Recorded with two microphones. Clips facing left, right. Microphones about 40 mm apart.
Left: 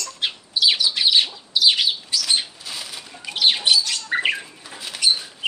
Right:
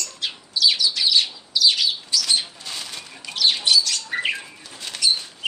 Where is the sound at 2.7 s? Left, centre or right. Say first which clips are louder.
Even; centre.